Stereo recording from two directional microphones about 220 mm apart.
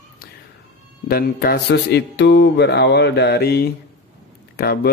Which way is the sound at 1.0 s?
45° left (ahead or behind).